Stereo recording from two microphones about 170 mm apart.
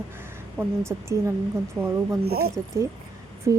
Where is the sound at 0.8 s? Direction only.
15° right (ahead or behind).